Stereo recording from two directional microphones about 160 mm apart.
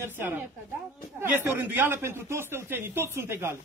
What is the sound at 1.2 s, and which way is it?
A man's voice, 15° right (ahead or behind).